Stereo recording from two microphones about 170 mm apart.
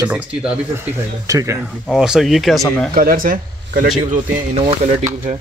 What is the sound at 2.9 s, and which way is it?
Speech, 55° right (ahead or behind).